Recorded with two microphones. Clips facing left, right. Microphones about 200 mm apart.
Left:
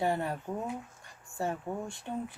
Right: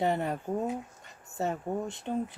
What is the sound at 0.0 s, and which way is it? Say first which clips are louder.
Speech: right 2 dB; 20° right (ahead or behind).